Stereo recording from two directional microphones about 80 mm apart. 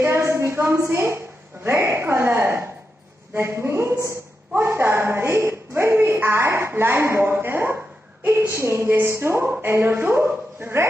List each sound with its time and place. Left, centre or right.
0.0 s a woman's voice: right